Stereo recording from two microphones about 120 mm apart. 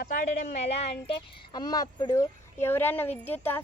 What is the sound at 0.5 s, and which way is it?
Speech, 60° left (ahead or behind).